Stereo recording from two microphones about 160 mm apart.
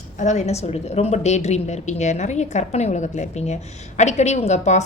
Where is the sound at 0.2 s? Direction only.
45° left (ahead or behind).